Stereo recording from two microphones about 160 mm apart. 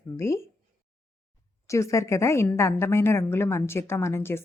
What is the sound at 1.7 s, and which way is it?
Speech, 20° left (ahead or behind).